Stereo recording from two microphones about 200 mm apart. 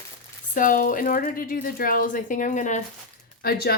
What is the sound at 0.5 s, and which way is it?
A woman's voice, 45° left (ahead or behind).